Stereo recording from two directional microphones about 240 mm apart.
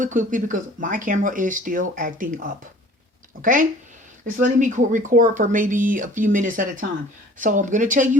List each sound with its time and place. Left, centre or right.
0.0 s speech: right